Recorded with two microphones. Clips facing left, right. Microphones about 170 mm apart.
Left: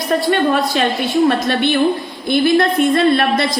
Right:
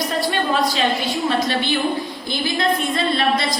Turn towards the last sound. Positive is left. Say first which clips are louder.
# left 6 dB
turn(degrees=60)  # may be behind; listen again after turning